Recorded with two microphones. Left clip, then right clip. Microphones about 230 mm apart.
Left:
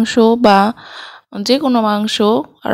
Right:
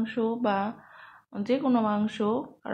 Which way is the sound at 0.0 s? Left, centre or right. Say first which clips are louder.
Left 17 dB; left.